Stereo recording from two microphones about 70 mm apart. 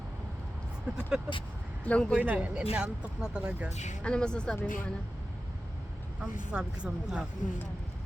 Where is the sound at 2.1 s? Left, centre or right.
Right.